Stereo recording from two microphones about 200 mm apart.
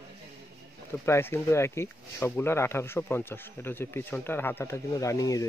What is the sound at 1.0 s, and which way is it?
Speech, 10° left (ahead or behind).